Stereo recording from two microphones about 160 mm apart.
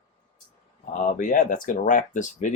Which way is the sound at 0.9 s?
55° left (ahead or behind).